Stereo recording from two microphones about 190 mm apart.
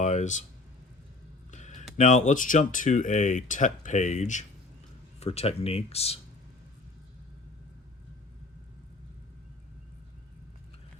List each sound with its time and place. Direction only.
0.0 s speech: 40° left (ahead or behind)
1.5 s a sound: 40° left (ahead or behind)
2.0 s speech: 40° left (ahead or behind)